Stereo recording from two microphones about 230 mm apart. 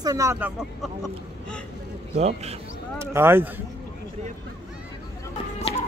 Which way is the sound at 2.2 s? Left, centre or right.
Right.